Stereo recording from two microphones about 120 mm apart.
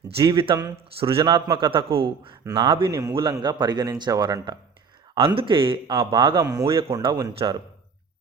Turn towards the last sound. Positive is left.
turn(degrees=-35)  # may be behind; listen again after turning